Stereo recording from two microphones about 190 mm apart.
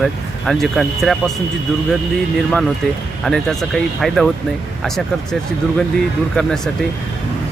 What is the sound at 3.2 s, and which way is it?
Speech, centre (ahead or behind).